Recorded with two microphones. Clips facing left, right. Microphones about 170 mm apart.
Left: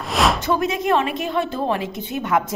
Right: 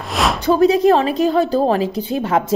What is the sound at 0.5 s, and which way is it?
A woman's voice, 30° right (ahead or behind).